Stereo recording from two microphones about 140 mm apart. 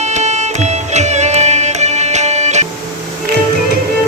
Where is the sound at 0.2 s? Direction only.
55° right (ahead or behind).